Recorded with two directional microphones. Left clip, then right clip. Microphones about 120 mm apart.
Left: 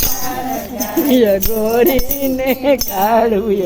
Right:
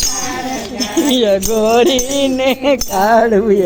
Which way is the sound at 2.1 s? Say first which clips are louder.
Right 3 dB; 10° right (ahead or behind).